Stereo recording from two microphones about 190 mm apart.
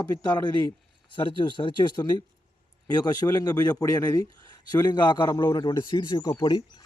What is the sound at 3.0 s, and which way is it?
A man's voice, 20° left (ahead or behind).